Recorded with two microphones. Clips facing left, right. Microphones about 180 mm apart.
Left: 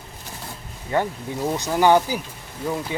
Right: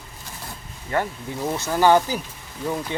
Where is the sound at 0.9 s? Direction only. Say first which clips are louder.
Left 2 dB; 15° left (ahead or behind).